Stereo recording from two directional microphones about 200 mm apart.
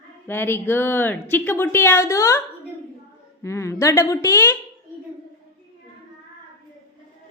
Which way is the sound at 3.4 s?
15° left (ahead or behind).